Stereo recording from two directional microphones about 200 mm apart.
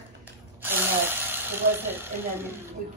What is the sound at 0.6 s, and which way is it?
Speech, 10° right (ahead or behind).